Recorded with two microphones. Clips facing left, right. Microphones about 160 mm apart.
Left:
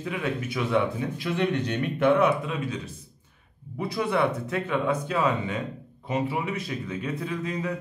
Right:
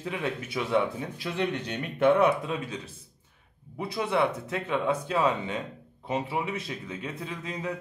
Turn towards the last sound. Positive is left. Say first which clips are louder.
# left 5 dB
turn(degrees=-25)  # may be behind; listen again after turning